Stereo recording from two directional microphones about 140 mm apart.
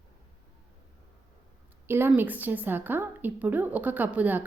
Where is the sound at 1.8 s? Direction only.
15° right (ahead or behind).